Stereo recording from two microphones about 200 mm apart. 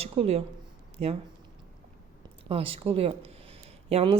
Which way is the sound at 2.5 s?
30° right (ahead or behind).